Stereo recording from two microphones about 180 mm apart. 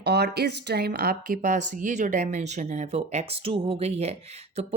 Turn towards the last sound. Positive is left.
turn(degrees=-35)  # may be behind; listen again after turning